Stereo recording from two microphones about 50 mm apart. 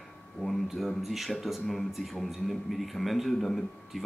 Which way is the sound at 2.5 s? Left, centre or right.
Centre.